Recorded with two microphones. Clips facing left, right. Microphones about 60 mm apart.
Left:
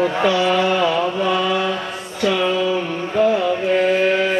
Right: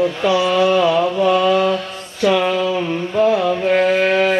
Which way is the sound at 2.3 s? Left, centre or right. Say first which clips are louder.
Right 3 dB; right.